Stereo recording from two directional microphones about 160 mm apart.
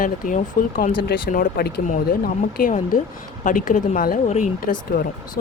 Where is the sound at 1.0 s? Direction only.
65° left (ahead or behind).